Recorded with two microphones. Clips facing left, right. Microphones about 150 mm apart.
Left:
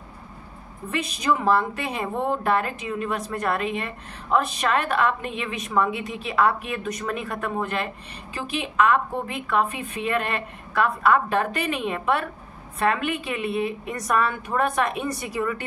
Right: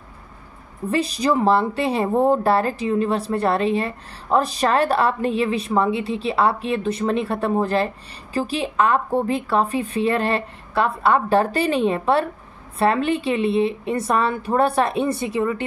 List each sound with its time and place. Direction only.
0.8 s a woman's voice: 35° right (ahead or behind)